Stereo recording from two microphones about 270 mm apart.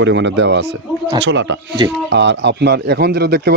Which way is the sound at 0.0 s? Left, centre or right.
Right.